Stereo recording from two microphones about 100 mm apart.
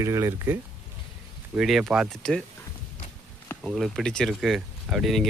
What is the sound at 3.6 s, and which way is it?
Speech, centre (ahead or behind).